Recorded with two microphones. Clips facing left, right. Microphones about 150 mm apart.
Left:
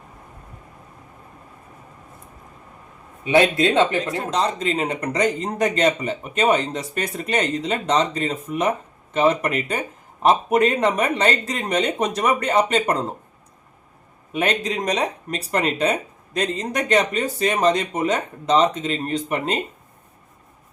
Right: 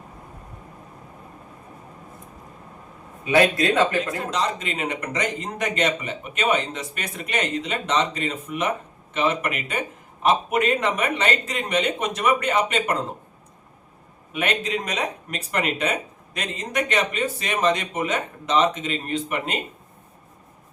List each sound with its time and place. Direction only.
3.2 s speech: 25° left (ahead or behind)
14.3 s speech: 35° left (ahead or behind)